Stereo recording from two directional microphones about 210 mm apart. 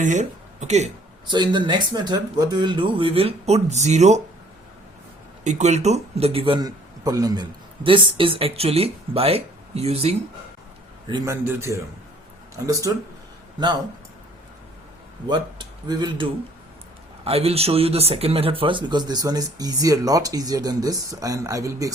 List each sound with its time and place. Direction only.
0.0 s speech: 35° right (ahead or behind)
1.3 s speech: 20° right (ahead or behind)
5.4 s speech: 35° right (ahead or behind)
11.1 s speech: 15° right (ahead or behind)
15.3 s speech: 20° right (ahead or behind)
17.2 s speech: 30° right (ahead or behind)